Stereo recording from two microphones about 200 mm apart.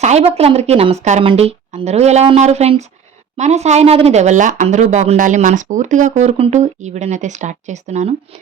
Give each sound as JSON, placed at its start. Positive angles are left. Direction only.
{"t": 0.0, "sound": "speech", "side_deg": -30}